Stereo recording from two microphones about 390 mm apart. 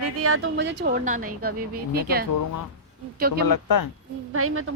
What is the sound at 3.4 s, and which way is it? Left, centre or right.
Speech, left.